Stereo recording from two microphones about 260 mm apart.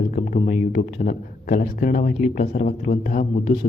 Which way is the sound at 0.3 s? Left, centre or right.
Left.